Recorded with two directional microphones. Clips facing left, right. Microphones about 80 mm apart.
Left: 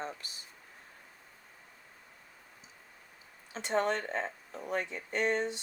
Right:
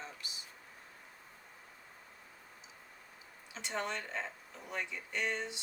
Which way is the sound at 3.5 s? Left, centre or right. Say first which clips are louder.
Left 8 dB; left.